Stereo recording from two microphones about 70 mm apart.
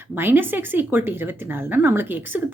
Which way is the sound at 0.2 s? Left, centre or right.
Right.